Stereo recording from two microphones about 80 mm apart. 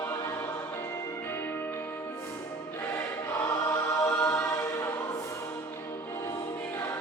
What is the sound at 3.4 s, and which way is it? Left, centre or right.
Choir, left.